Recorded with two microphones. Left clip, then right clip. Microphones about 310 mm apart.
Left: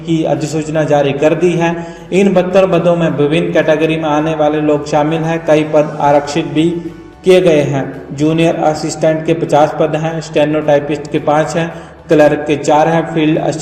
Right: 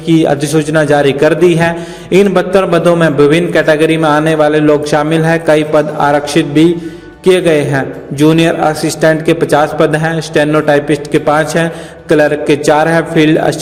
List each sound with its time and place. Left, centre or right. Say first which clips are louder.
0.1 s a man's voice: right 5 dB; right